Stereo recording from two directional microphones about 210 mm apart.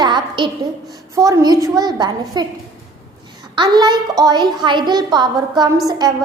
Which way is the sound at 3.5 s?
20° right (ahead or behind).